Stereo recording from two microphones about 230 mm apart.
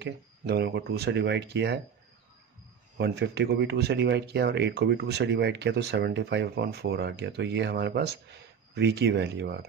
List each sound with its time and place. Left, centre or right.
0.0 s speech: right
3.0 s speech: right